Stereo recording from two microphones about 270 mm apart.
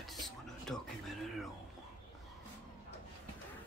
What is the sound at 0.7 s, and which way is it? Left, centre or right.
Speech, centre.